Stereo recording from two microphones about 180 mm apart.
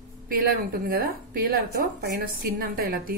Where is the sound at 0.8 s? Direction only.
55° right (ahead or behind).